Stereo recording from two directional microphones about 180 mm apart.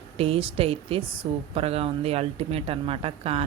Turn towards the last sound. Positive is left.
turn(degrees=-35)  # may be behind; listen again after turning